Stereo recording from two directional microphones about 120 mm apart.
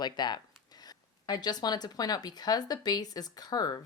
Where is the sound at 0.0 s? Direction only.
35° left (ahead or behind).